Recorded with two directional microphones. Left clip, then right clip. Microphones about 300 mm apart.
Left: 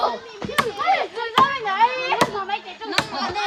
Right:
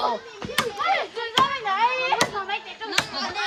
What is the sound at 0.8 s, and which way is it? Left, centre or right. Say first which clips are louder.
Chop: left 3 dB; left.